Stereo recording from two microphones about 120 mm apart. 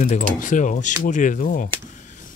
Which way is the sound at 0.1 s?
90° left.